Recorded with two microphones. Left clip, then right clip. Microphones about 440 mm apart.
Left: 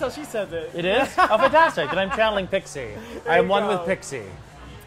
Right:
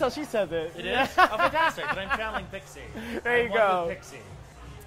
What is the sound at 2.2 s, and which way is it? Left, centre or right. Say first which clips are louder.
Speech: left 11 dB; left.